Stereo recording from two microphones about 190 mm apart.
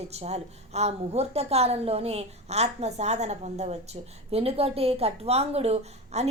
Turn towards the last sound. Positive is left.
turn(degrees=-35)  # may be behind; listen again after turning